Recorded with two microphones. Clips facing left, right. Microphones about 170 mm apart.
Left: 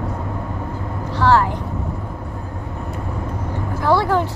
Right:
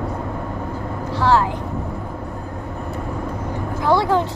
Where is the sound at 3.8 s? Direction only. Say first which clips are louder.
Even; 15° right (ahead or behind).